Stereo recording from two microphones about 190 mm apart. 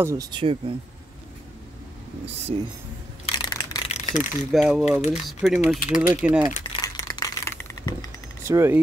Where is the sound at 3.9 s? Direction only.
40° left (ahead or behind).